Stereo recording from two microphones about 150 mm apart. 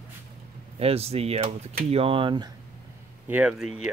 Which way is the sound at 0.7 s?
40° right (ahead or behind).